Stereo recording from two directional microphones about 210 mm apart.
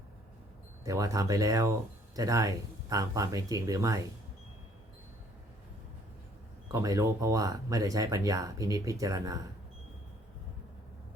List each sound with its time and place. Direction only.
0.9 s speech: 15° right (ahead or behind)
6.7 s speech: 15° right (ahead or behind)